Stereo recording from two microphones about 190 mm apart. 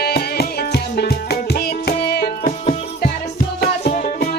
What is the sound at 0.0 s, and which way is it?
Music, 55° left (ahead or behind).